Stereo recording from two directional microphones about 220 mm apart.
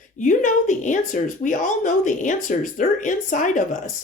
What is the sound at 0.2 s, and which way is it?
Speech, 35° left (ahead or behind).